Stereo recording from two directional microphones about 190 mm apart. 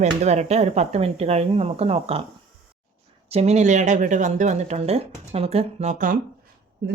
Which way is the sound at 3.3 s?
35° right (ahead or behind).